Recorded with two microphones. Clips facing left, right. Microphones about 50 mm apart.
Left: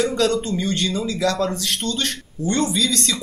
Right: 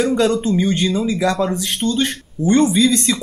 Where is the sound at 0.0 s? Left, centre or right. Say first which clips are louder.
Right 3 dB; centre.